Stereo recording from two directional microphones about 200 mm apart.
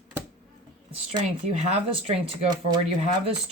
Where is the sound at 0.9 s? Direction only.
30° right (ahead or behind).